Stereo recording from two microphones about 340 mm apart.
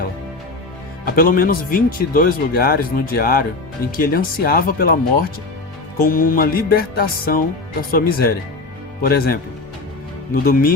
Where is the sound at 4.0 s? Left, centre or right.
Left.